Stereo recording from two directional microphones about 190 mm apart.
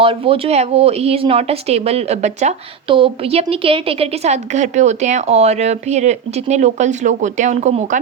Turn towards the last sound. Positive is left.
turn(degrees=-40)  # may be behind; listen again after turning